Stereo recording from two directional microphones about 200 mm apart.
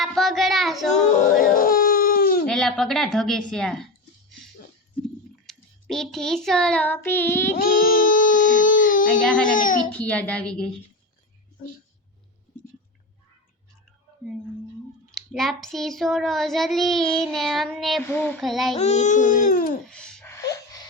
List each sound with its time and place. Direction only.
0.0 s child singing: centre (ahead or behind)
1.1 s a sound: 45° left (ahead or behind)
2.5 s child singing: 5° left (ahead or behind)
5.0 s child singing: centre (ahead or behind)
7.5 s baby cry: 45° left (ahead or behind)
9.2 s child singing: 5° left (ahead or behind)
9.6 s speech: 40° left (ahead or behind)
9.9 s a woman's voice: 5° left (ahead or behind)
11.6 s speech: 25° left (ahead or behind)
15.1 s child singing: centre (ahead or behind)
18.8 s speech: 35° left (ahead or behind)
19.9 s wail: 5° left (ahead or behind)